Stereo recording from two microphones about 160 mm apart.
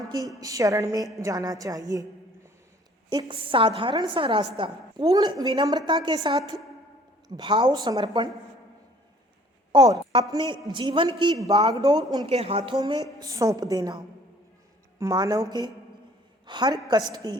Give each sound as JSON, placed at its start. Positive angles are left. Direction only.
{"t": 0.3, "sound": "a woman's voice", "side_deg": -20}
{"t": 3.1, "sound": "a woman's voice", "side_deg": -30}
{"t": 9.7, "sound": "a woman's voice", "side_deg": -20}
{"t": 12.3, "sound": "speech", "side_deg": -40}
{"t": 12.7, "sound": "a woman's voice", "side_deg": -25}